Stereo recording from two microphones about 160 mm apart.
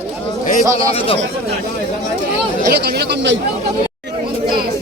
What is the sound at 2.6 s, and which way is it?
Speech, 80° right.